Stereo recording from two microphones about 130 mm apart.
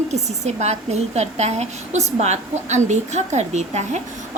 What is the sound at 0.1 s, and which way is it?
A woman's voice, 60° right (ahead or behind).